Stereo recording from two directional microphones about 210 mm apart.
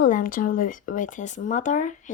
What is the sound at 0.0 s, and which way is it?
Speech, 40° left (ahead or behind).